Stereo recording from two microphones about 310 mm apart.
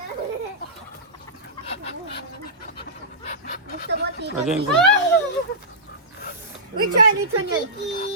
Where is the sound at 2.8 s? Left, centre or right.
Left.